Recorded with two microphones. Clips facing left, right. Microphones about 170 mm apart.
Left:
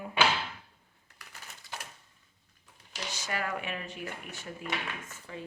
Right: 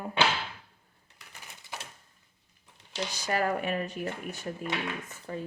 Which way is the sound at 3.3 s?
40° right (ahead or behind).